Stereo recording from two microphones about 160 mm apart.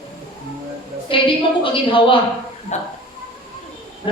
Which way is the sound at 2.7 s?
45° left (ahead or behind).